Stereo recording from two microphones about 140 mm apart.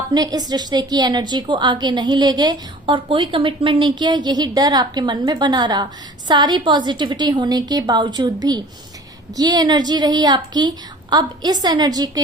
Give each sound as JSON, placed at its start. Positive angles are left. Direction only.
{"t": 0.1, "sound": "a woman's voice", "side_deg": -30}